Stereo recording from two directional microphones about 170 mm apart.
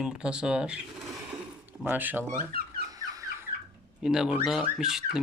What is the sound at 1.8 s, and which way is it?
Speech, 10° right (ahead or behind).